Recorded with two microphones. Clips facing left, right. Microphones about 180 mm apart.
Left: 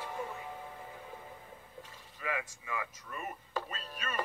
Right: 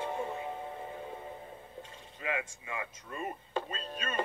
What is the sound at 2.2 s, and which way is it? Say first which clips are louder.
A woman's voice: right 2 dB; 25° right (ahead or behind).